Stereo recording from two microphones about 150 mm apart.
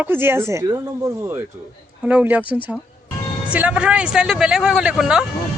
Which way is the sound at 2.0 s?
10° right (ahead or behind).